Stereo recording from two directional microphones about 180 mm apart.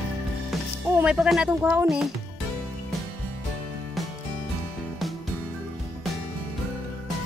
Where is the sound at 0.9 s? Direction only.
5° right (ahead or behind).